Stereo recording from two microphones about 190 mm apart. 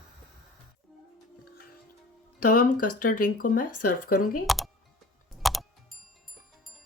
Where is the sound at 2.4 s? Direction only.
45° left (ahead or behind).